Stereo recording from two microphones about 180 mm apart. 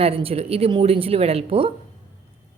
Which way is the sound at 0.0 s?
30° right (ahead or behind).